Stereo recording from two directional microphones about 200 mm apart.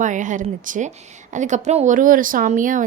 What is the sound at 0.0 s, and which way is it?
A woman's voice, 40° right (ahead or behind).